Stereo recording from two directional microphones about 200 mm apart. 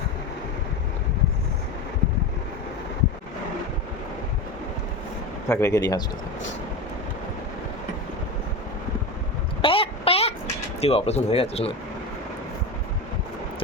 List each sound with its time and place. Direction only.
5.5 s speech: 15° left (ahead or behind)
9.6 s a sound: 25° left (ahead or behind)
10.8 s speech: 30° left (ahead or behind)